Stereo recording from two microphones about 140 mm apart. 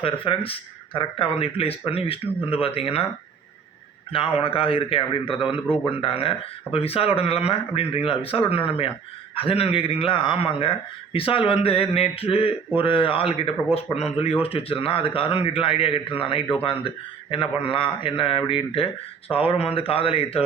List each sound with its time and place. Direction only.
0.0 s speech: 40° left (ahead or behind)
4.1 s a man's voice: 40° left (ahead or behind)